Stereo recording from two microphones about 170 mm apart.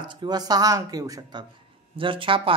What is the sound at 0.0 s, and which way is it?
Speech, 25° right (ahead or behind).